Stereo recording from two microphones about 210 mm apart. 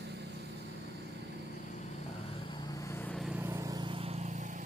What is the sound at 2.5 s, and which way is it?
Vehicle, 20° left (ahead or behind).